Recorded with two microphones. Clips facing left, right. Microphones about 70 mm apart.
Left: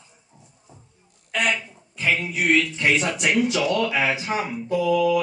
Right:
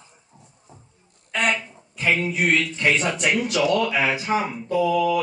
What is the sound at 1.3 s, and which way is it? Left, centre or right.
Speech, right.